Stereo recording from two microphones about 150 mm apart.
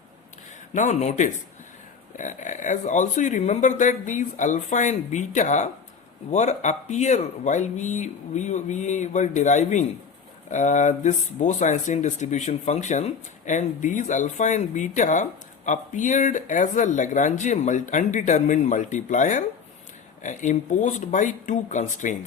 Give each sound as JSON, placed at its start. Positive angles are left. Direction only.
{"t": 0.7, "sound": "speech", "side_deg": 55}